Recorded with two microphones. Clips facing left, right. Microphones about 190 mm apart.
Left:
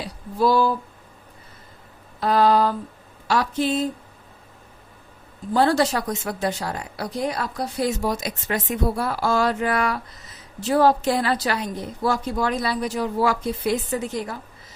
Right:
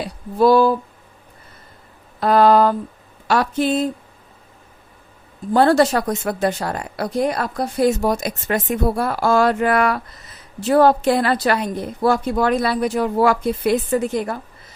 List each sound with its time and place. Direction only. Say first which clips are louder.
0.0 s speech: right 6 dB; 60° right (ahead or behind)
2.2 s speech: right 5 dB; 55° right (ahead or behind)
5.5 s speech: right 5 dB; 55° right (ahead or behind)